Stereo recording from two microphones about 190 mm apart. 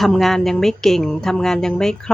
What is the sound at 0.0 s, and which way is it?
Speech, centre (ahead or behind).